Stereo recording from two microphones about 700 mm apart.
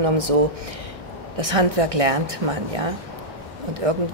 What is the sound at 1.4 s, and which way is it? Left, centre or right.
A woman's voice, right.